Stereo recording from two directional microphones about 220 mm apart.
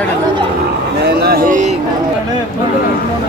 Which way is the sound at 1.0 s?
45° right (ahead or behind).